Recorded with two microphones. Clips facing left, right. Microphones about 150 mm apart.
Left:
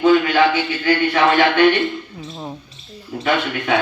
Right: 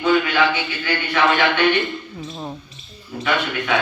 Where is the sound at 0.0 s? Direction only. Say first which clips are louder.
Left 4 dB; 40° left (ahead or behind).